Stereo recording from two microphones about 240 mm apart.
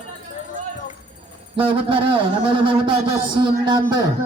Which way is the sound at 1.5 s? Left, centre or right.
Right.